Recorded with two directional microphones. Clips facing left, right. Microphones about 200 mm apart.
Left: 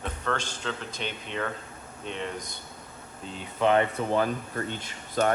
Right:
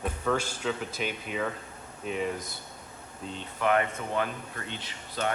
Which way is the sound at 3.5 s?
25° left (ahead or behind).